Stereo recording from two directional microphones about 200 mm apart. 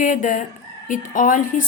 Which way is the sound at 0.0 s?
40° left (ahead or behind).